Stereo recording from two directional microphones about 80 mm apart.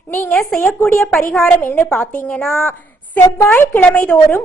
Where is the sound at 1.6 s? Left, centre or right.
Left.